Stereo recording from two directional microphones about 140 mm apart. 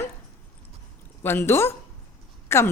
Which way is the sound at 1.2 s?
15° left (ahead or behind).